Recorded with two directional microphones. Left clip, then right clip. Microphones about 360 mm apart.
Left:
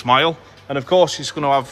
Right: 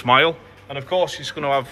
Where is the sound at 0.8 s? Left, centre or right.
Centre.